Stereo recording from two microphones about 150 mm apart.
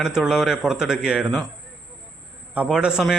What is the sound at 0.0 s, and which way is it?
A man's voice, 5° right (ahead or behind).